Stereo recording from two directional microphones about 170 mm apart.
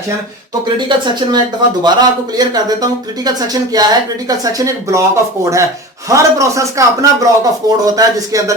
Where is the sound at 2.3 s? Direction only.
25° right (ahead or behind).